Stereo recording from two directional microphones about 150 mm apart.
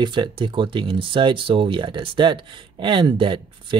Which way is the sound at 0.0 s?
30° right (ahead or behind).